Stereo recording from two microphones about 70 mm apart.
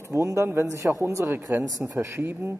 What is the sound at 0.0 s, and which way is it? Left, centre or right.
A man's voice, right.